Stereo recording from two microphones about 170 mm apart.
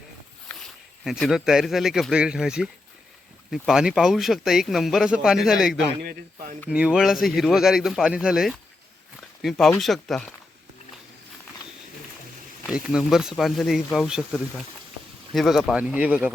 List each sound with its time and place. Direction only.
1.0 s speech: centre (ahead or behind)
6.0 s speech: 60° right (ahead or behind)
6.7 s speech: 5° right (ahead or behind)
12.7 s speech: 5° right (ahead or behind)